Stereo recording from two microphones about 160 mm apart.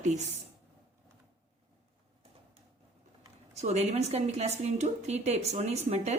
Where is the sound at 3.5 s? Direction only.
45° right (ahead or behind).